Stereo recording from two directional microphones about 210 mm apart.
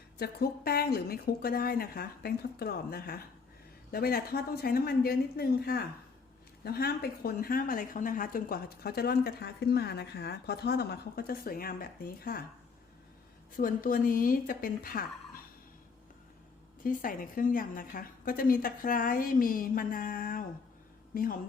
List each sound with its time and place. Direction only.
0.2 s speech: 45° left (ahead or behind)
13.6 s speech: 40° left (ahead or behind)
16.8 s a woman's voice: 40° left (ahead or behind)